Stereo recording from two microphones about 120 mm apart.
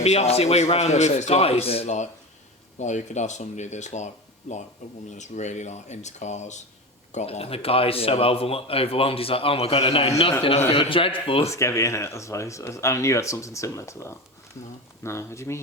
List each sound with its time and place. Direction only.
0.0 s a man's voice: 65° left (ahead or behind)
2.7 s a man's voice: 85° left; by 11.5 s 50° left (ahead or behind)
11.5 s speech: 25° left (ahead or behind)